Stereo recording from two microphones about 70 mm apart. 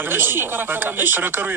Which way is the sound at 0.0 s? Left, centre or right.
Right.